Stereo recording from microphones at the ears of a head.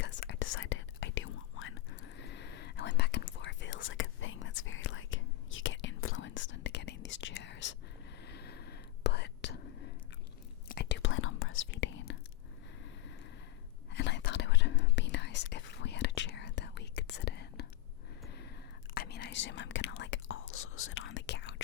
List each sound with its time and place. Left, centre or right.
0.0 s whispering: left
13.9 s whispering: left
18.9 s whispering: left